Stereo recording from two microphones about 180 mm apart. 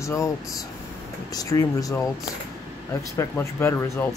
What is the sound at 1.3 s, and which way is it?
Speech, 20° left (ahead or behind).